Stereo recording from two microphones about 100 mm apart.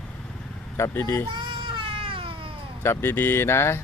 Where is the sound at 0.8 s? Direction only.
30° left (ahead or behind).